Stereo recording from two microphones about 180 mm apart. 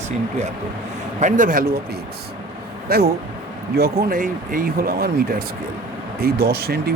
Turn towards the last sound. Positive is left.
turn(degrees=-60)  # may be behind; listen again after turning